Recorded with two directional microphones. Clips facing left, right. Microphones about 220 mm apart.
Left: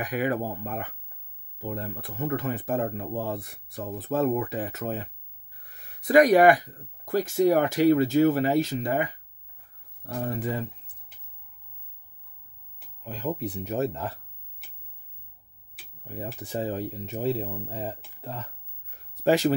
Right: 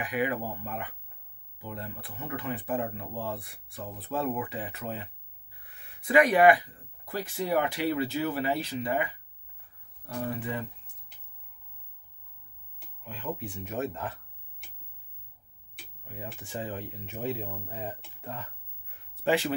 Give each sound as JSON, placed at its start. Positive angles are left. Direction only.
{"t": 0.0, "sound": "speech", "side_deg": 45}
{"t": 13.0, "sound": "speech", "side_deg": 40}
{"t": 16.1, "sound": "speech", "side_deg": 40}